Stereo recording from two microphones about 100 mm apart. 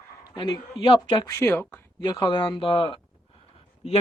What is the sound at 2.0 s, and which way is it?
Speech, 45° left (ahead or behind).